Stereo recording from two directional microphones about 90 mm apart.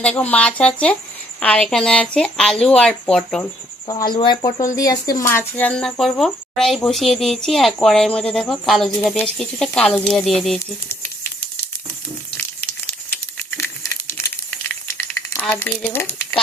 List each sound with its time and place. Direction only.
0.0 s a woman's voice: 15° left (ahead or behind)
3.8 s speech: 50° left (ahead or behind)
4.6 s speech: 40° left (ahead or behind)
5.3 s speech: 25° left (ahead or behind)
5.6 s speech: 10° left (ahead or behind)
13.6 s crumpling: 30° left (ahead or behind)
15.4 s speech: 20° left (ahead or behind)